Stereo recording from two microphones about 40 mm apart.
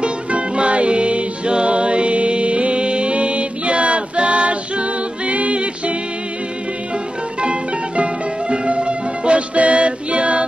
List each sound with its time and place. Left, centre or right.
0.0 s music: right
7.4 s music: right